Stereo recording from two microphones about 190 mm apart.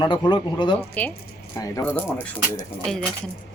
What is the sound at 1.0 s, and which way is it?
Speech, 10° left (ahead or behind).